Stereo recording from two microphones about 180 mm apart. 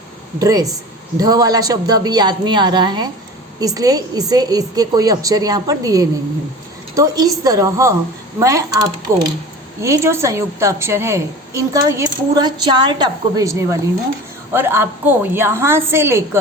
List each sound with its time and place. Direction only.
0.3 s a man's voice: 20° right (ahead or behind)